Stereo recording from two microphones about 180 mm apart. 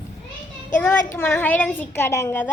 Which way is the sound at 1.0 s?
15° left (ahead or behind).